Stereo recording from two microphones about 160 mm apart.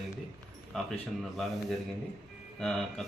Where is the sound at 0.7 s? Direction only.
5° left (ahead or behind).